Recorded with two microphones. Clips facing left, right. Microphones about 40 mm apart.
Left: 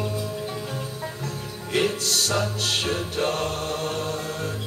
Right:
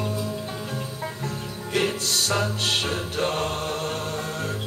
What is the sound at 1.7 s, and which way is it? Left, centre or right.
Music, centre.